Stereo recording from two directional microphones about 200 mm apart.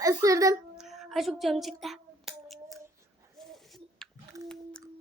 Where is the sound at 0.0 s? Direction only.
15° right (ahead or behind).